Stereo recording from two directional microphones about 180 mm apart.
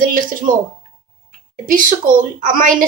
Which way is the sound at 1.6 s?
50° right (ahead or behind).